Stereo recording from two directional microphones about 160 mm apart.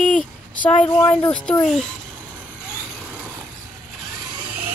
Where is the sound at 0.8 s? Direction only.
25° left (ahead or behind).